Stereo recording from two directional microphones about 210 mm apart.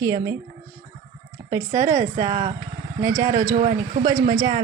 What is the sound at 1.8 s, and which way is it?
Speech, 35° right (ahead or behind).